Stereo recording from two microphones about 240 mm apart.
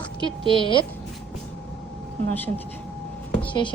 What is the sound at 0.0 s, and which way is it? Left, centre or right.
Speech, left.